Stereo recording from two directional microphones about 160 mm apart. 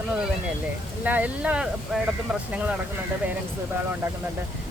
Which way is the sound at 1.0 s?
10° right (ahead or behind).